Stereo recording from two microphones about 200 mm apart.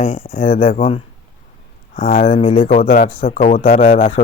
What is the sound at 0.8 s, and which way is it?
Speech, 30° left (ahead or behind).